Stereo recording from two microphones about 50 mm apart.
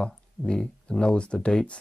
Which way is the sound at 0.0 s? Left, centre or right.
Centre.